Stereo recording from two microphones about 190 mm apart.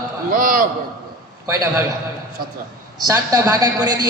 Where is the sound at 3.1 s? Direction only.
20° right (ahead or behind).